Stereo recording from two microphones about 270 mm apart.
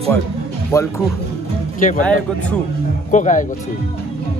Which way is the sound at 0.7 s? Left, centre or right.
Centre.